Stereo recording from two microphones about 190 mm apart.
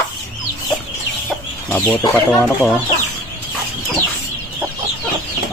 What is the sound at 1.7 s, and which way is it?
Speech, 10° left (ahead or behind).